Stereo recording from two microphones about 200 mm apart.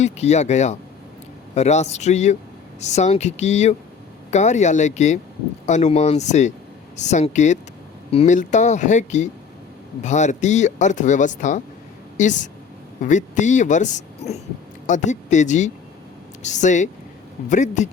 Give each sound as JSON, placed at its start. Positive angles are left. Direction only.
{"t": 0.0, "sound": "a woman's voice", "side_deg": 35}